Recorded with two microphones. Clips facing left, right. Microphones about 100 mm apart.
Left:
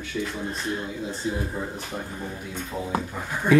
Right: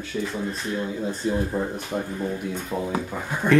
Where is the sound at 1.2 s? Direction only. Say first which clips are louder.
Right 4 dB; 50° right (ahead or behind).